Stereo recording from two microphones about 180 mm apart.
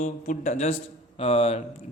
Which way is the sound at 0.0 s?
40° left (ahead or behind).